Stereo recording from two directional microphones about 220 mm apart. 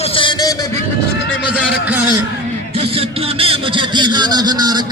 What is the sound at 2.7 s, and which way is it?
Speech, 25° right (ahead or behind).